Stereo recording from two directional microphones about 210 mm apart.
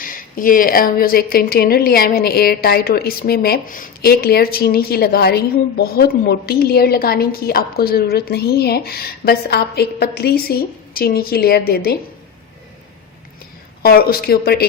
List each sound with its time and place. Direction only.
0.0 s speech: 40° left (ahead or behind)
13.8 s speech: 45° left (ahead or behind)